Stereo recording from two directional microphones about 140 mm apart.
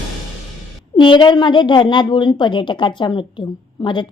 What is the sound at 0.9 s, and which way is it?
A woman's voice, 35° left (ahead or behind).